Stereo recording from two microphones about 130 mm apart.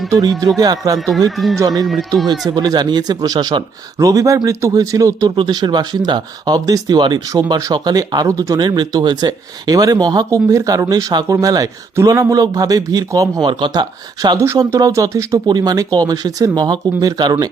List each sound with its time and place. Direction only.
0.1 s speech: 30° right (ahead or behind)
0.9 s speech: centre (ahead or behind)
1.5 s speech: 30° right (ahead or behind)